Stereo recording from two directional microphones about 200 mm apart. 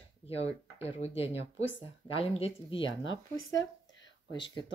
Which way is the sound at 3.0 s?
70° left (ahead or behind).